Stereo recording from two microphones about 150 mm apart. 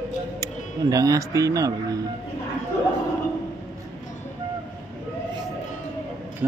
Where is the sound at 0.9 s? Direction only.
25° right (ahead or behind).